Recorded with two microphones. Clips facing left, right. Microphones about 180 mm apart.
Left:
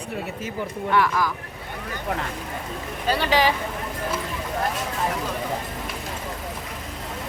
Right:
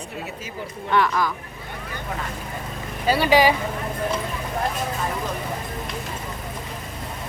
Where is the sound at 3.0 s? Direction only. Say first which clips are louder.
Right 4 dB; 10° right (ahead or behind).